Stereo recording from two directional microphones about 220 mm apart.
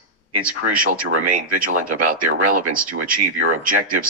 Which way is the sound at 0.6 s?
40° right (ahead or behind).